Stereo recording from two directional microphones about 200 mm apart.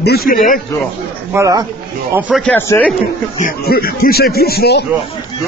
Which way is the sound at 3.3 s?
45° left (ahead or behind).